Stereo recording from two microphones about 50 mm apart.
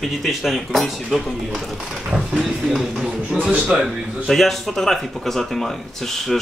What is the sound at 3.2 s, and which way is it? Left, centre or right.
Speech, right.